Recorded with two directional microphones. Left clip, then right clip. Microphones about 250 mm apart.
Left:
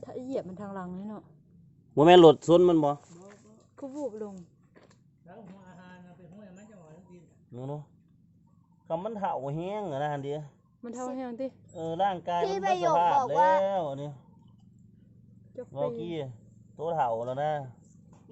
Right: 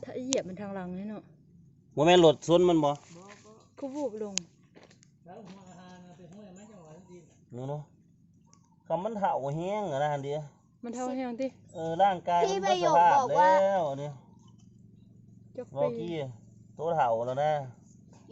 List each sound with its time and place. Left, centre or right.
0.0 s a sound: centre
0.5 s speech: centre
2.0 s speech: left
3.8 s speech: centre
7.5 s speech: centre
8.9 s speech: centre
15.5 s speech: centre